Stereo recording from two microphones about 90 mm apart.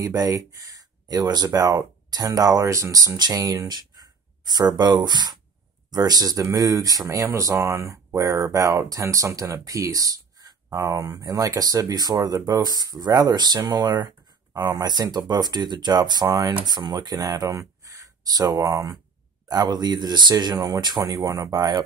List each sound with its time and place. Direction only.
0.0 s speech: 40° right (ahead or behind)
19.5 s speech: 50° right (ahead or behind)
20.5 s speech: 35° right (ahead or behind)
20.8 s speech: 50° right (ahead or behind)